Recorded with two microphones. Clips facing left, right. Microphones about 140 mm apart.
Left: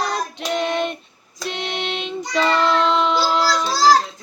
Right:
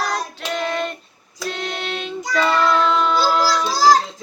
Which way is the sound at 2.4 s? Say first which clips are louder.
Even; 5° right (ahead or behind).